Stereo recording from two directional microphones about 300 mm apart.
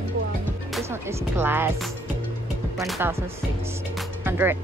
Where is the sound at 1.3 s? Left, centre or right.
Centre.